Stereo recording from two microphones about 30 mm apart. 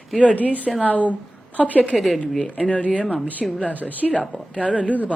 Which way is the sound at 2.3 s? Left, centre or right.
Left.